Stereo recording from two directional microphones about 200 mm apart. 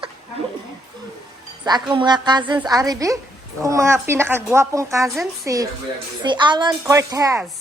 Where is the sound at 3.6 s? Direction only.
15° right (ahead or behind).